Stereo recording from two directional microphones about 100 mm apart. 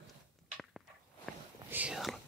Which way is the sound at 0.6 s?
Centre (ahead or behind).